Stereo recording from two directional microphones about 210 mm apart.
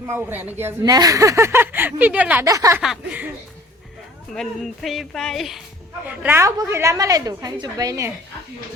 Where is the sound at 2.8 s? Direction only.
5° right (ahead or behind).